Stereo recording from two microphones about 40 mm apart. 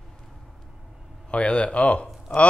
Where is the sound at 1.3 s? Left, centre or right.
Left.